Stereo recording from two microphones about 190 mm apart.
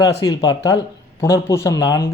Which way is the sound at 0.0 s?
20° left (ahead or behind).